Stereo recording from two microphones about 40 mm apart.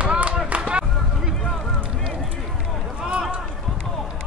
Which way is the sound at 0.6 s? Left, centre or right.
Right.